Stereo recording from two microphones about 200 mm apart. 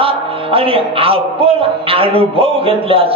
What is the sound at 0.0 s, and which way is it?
Speech, 30° right (ahead or behind).